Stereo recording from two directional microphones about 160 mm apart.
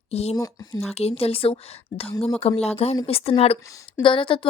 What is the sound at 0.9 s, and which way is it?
A woman's voice, 40° left (ahead or behind).